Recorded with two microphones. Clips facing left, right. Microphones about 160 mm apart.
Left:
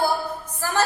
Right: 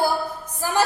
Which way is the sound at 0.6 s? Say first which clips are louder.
Right 2 dB; 15° right (ahead or behind).